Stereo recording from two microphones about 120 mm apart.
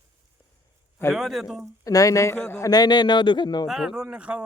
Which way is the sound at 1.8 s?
30° left (ahead or behind).